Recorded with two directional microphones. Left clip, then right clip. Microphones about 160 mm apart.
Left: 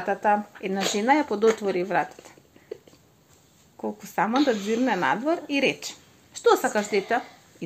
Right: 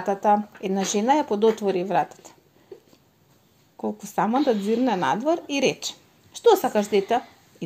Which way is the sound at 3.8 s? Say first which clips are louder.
Right 1 dB; 35° right (ahead or behind).